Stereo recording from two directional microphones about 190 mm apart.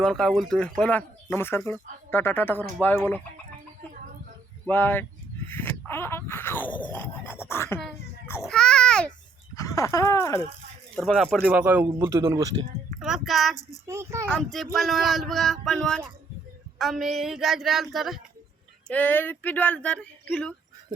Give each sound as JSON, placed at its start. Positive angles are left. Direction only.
{"t": 0.0, "sound": "speech", "side_deg": 5}
{"t": 4.6, "sound": "a child's voice", "side_deg": 10}
{"t": 9.6, "sound": "speech", "side_deg": 15}
{"t": 10.9, "sound": "speech", "side_deg": 0}
{"t": 11.3, "sound": "speech", "side_deg": -10}
{"t": 13.0, "sound": "speech", "side_deg": 0}
{"t": 13.8, "sound": "speech", "side_deg": -15}
{"t": 14.3, "sound": "speech", "side_deg": 5}